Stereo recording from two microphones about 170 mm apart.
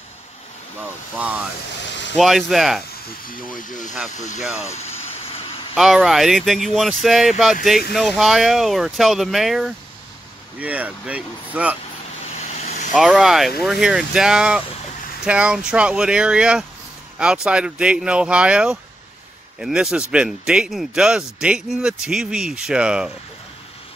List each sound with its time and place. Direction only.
1.1 s speech: 10° right (ahead or behind)
1.9 s vehicle: 90° left
2.1 s speech: centre (ahead or behind)
3.3 s speech: 50° left (ahead or behind)
4.4 s speech: 5° right (ahead or behind)
4.7 s a sound: 35° left (ahead or behind)
5.8 s speech: centre (ahead or behind)
12.4 s vehicle: 40° left (ahead or behind)
12.9 s speech: 5° right (ahead or behind)